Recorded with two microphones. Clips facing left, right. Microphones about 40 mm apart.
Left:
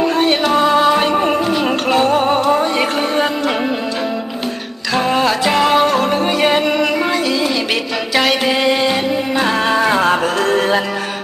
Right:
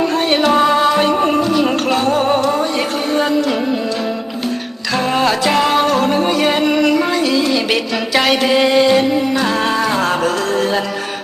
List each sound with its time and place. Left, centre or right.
0.2 s music: centre
4.9 s music: centre
8.1 s music: centre
9.7 s music: centre